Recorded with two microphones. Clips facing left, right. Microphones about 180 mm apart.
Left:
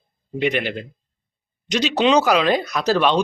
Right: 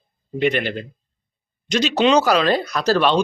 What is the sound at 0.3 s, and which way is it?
Speech, 5° left (ahead or behind).